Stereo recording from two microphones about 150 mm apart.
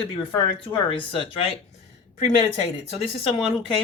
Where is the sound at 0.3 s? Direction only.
35° left (ahead or behind).